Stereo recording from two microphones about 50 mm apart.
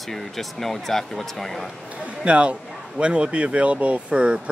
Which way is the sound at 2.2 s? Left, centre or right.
Right.